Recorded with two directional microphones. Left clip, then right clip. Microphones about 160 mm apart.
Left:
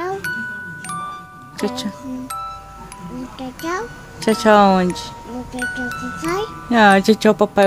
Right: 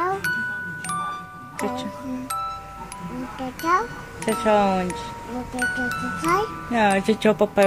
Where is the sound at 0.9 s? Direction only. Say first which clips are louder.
Even; centre (ahead or behind).